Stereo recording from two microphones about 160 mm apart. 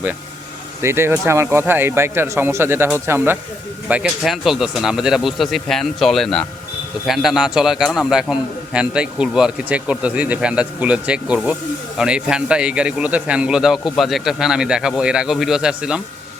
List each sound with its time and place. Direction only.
0.8 s a man's voice: 15° right (ahead or behind)